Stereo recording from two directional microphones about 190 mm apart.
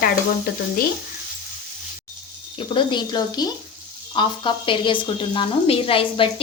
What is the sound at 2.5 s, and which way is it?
A woman's voice, 25° left (ahead or behind).